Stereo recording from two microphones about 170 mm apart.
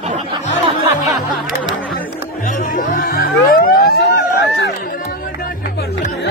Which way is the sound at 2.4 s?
55° left (ahead or behind).